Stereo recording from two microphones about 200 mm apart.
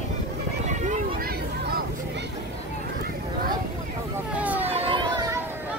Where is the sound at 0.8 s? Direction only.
40° right (ahead or behind).